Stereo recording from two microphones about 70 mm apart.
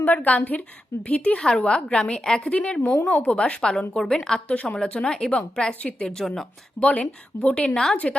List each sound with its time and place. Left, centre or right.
0.0 s a woman's voice: left; by 6.8 s centre
6.8 s a woman's voice: left